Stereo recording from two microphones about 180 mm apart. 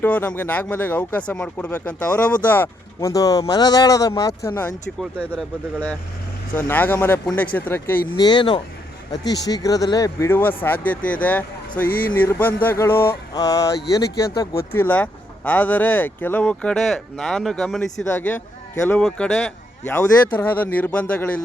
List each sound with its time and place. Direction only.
0.0 s speech: 10° left (ahead or behind)
8.1 s speech: 25° left (ahead or behind); by 21.4 s 10° left (ahead or behind)